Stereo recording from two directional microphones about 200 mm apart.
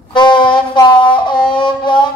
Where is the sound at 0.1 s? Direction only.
25° left (ahead or behind).